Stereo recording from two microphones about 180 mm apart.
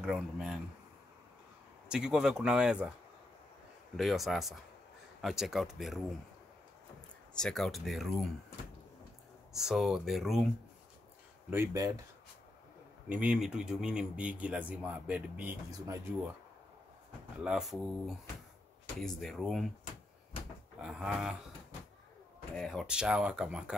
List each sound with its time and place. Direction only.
0.0 s speech: 5° right (ahead or behind)
1.9 s speech: 5° right (ahead or behind)
3.9 s speech: centre (ahead or behind)
7.3 s speech: 5° left (ahead or behind)
9.5 s speech: centre (ahead or behind)
11.5 s speech: 15° right (ahead or behind)
13.1 s speech: 5° right (ahead or behind)
17.4 s speech: centre (ahead or behind)
20.8 s speech: 5° right (ahead or behind)
22.6 s speech: centre (ahead or behind)